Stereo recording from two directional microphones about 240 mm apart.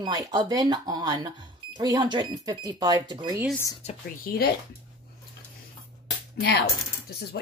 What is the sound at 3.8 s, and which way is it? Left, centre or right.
Speech, left.